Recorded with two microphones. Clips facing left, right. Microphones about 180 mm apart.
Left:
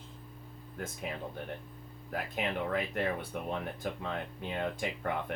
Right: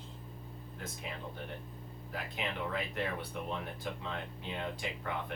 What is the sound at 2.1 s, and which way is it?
Speech, 55° left (ahead or behind).